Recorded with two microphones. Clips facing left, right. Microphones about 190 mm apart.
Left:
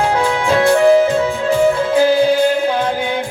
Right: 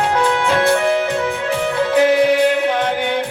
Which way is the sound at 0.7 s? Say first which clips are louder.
Left 6 dB; 35° left (ahead or behind).